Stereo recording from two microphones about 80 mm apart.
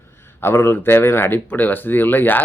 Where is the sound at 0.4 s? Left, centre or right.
Left.